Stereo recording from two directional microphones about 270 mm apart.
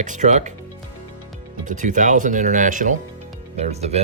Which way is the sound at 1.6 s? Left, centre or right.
Right.